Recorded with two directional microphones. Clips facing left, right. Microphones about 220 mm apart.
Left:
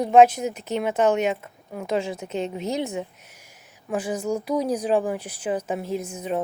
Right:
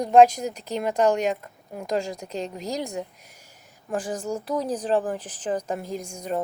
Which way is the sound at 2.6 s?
35° right (ahead or behind).